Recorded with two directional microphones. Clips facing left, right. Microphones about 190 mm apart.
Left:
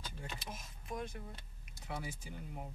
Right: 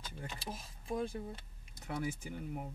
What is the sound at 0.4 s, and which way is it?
Speech, 30° right (ahead or behind).